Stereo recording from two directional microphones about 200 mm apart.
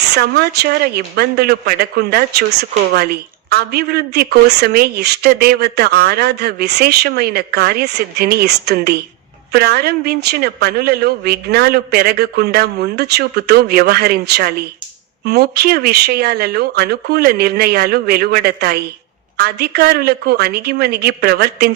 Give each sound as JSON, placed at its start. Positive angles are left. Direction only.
{"t": 0.1, "sound": "speech", "side_deg": -55}